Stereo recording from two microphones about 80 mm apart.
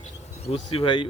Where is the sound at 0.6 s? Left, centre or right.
Left.